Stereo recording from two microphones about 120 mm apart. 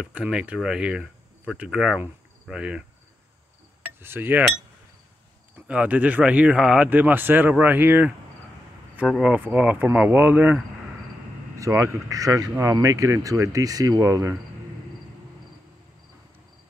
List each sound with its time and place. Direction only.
0.0 s speech: 10° right (ahead or behind)
4.0 s speech: 20° right (ahead or behind)
5.7 s speech: 10° right (ahead or behind)
9.2 s speech: 10° right (ahead or behind); by 14.3 s 25° right (ahead or behind)